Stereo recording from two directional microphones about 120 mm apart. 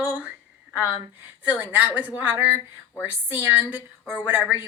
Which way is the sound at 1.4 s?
15° right (ahead or behind).